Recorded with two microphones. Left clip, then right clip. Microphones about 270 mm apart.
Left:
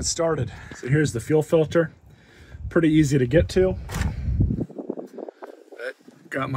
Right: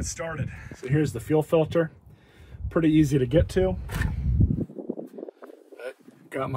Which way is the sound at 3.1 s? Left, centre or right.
Left.